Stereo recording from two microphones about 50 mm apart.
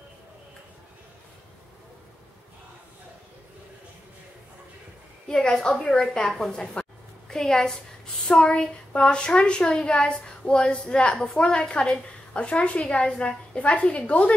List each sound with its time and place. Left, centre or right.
5.3 s a woman's voice: centre